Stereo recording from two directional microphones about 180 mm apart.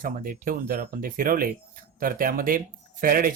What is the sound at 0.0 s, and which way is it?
Speech, 50° right (ahead or behind).